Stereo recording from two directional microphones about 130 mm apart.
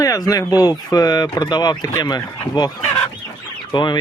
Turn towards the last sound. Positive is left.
turn(degrees=35)  # may be behind; listen again after turning